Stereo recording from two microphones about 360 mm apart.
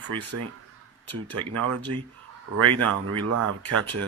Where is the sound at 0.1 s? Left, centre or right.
Right.